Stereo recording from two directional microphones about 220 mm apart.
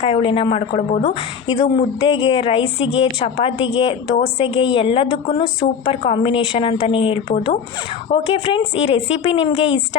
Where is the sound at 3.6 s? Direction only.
60° left (ahead or behind).